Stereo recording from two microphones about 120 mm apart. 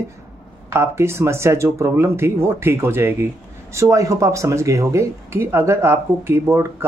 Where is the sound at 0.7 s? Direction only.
20° right (ahead or behind).